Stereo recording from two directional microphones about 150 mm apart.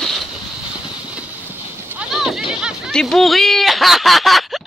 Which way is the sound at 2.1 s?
Centre (ahead or behind).